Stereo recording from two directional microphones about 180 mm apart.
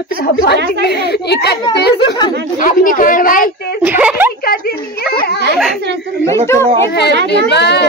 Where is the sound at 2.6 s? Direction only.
50° left (ahead or behind).